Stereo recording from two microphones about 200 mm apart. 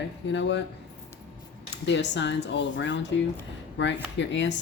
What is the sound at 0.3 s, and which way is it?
Speech, 65° left (ahead or behind).